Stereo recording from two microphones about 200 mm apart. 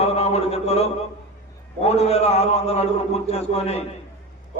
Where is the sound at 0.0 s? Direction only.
30° left (ahead or behind).